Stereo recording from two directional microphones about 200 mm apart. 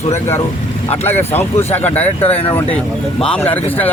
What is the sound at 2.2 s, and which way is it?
Speech, 30° left (ahead or behind).